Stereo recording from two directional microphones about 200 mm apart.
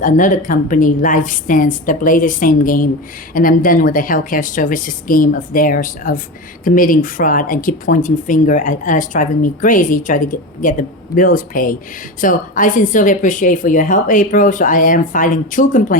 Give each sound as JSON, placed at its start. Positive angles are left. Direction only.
{"t": 0.0, "sound": "a woman's voice", "side_deg": 40}